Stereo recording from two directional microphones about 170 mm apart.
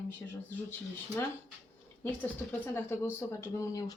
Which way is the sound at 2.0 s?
10° left (ahead or behind).